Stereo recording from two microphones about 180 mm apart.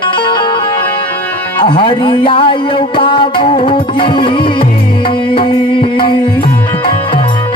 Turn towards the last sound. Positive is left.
turn(degrees=30)  # may be behind; listen again after turning